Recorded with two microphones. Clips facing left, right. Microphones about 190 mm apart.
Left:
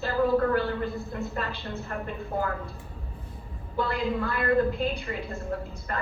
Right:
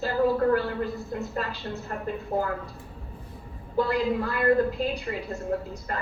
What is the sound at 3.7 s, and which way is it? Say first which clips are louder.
A woman's voice: right 3 dB; 40° right (ahead or behind).